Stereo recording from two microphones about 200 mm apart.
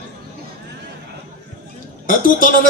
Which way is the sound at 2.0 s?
45° left (ahead or behind).